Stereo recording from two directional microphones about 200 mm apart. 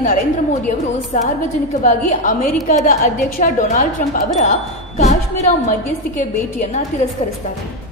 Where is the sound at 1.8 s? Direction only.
40° left (ahead or behind).